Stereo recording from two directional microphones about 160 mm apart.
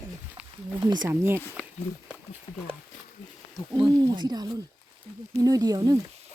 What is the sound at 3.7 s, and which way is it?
Speech, 25° right (ahead or behind).